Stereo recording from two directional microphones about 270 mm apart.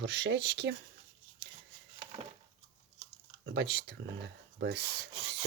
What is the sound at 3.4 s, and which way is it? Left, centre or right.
Speech, right.